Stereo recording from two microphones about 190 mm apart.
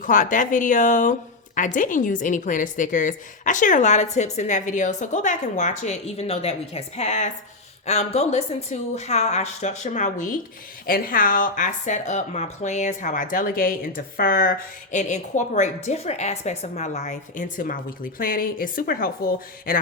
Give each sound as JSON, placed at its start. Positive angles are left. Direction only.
{"t": 0.0, "sound": "a woman's voice", "side_deg": 45}
{"t": 14.9, "sound": "a woman's voice", "side_deg": 40}